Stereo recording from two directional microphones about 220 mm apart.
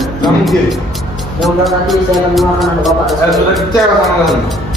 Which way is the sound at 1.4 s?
Centre (ahead or behind).